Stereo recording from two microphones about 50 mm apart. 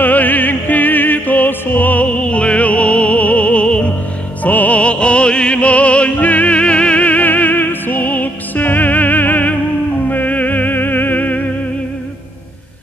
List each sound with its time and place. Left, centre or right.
0.0 s music: left